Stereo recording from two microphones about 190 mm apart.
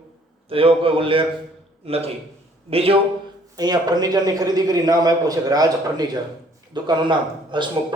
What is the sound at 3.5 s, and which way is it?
A man's voice, 20° right (ahead or behind).